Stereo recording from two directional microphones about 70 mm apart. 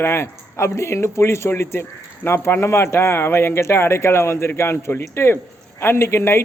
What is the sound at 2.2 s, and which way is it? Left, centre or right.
Speech, left.